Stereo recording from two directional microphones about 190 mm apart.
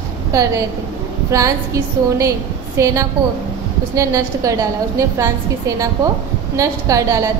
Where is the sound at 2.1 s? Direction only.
15° right (ahead or behind).